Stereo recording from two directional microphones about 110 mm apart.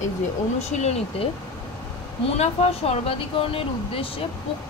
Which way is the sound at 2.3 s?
65° left (ahead or behind).